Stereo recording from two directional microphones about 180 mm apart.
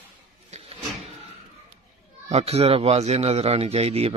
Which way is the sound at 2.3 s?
35° right (ahead or behind).